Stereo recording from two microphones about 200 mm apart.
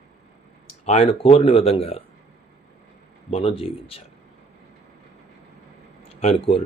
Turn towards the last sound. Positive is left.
turn(degrees=30)  # may be behind; listen again after turning